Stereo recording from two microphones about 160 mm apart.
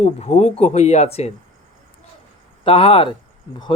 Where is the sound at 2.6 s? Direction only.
35° left (ahead or behind).